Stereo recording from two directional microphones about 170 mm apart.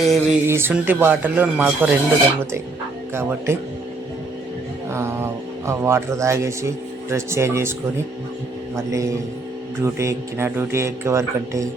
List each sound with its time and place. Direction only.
0.0 s speech: centre (ahead or behind)
0.4 s a man's voice: 15° right (ahead or behind)
3.2 s a man's voice: 15° right (ahead or behind)
4.9 s a man's voice: 15° right (ahead or behind)
8.9 s a man's voice: 20° right (ahead or behind)